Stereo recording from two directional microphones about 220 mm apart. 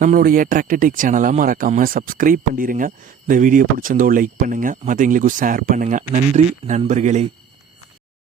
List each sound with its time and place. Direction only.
0.0 s speech: 40° right (ahead or behind)